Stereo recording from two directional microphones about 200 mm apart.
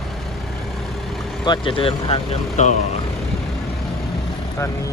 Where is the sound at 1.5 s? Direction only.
25° left (ahead or behind).